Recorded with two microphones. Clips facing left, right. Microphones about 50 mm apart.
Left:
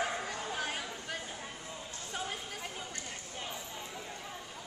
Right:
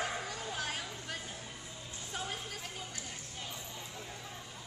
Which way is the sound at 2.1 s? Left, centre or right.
Centre.